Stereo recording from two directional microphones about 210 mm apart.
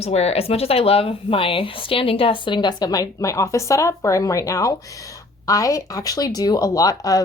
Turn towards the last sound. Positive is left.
turn(degrees=15)  # may be behind; listen again after turning